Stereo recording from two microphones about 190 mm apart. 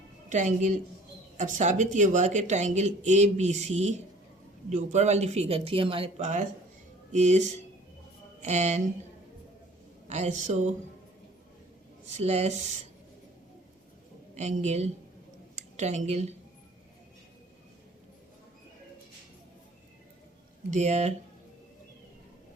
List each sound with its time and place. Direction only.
0.3 s speech: 40° right (ahead or behind)
10.1 s speech: 40° right (ahead or behind)
12.1 s speech: 35° right (ahead or behind)
14.3 s speech: 35° right (ahead or behind)
20.7 s speech: 35° right (ahead or behind)